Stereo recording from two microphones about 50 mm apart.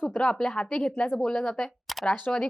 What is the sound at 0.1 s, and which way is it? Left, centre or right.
A woman's voice, centre.